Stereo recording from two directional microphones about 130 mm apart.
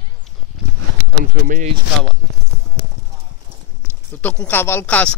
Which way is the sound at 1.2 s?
90° right.